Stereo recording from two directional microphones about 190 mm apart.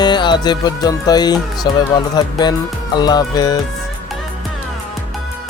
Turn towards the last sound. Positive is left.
turn(degrees=20)  # may be behind; listen again after turning